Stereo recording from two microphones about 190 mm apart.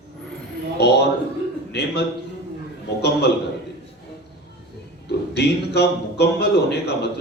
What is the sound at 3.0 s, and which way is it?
Speech, 60° left (ahead or behind).